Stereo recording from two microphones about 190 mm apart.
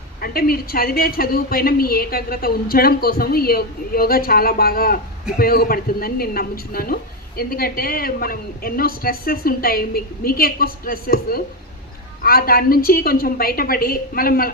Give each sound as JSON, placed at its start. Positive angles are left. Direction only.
{"t": 0.2, "sound": "a woman's voice", "side_deg": 50}